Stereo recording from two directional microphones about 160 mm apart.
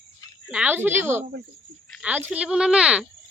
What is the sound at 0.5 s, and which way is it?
Speech, 10° right (ahead or behind).